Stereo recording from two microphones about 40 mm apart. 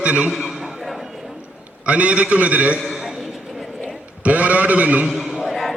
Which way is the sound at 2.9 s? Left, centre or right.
Centre.